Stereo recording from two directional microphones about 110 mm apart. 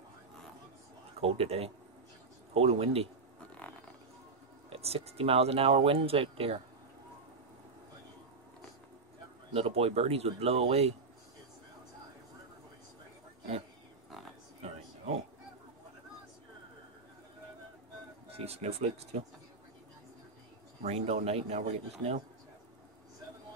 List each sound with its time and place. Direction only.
1.2 s speech: 60° right (ahead or behind)
3.5 s a sound: 10° left (ahead or behind)
4.6 s speech: 65° right (ahead or behind)
9.5 s speech: 65° right (ahead or behind)
18.4 s a man's voice: 70° right (ahead or behind)
20.8 s a man's voice: 75° right (ahead or behind)